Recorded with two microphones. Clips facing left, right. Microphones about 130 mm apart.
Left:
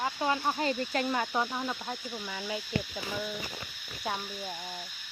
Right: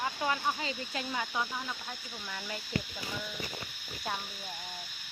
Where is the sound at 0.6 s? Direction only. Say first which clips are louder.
Left 8 dB; 55° left (ahead or behind).